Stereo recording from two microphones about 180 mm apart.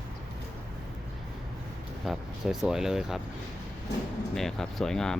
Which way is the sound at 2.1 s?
Centre (ahead or behind).